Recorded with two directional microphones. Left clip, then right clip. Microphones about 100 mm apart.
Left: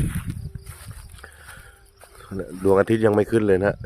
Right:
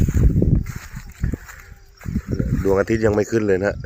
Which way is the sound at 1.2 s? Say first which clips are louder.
Right 12 dB; 10° left (ahead or behind).